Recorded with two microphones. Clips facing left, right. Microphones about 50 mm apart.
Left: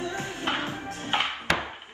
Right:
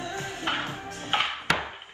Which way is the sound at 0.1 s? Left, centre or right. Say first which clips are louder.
Left 1 dB; left.